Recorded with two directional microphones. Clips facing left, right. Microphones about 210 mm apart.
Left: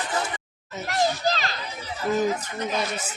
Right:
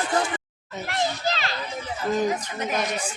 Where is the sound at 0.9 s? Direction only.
40° left (ahead or behind).